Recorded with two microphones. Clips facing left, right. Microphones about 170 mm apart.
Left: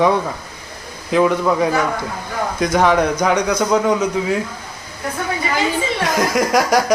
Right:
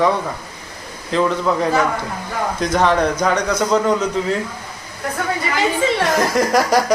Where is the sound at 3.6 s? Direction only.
5° left (ahead or behind).